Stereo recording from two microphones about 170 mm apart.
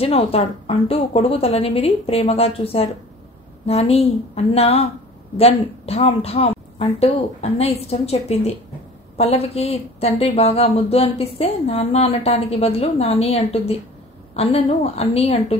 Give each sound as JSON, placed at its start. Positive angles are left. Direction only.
{"t": 0.0, "sound": "a woman's voice", "side_deg": 35}